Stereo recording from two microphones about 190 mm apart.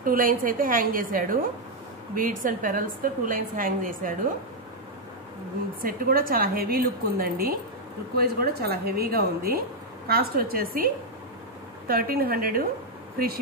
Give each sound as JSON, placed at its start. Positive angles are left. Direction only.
{"t": 0.0, "sound": "a woman's voice", "side_deg": -50}
{"t": 5.8, "sound": "a woman's voice", "side_deg": -50}
{"t": 11.9, "sound": "a woman's voice", "side_deg": -50}